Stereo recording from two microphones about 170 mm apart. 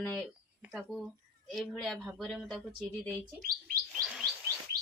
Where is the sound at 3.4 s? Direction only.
55° right (ahead or behind).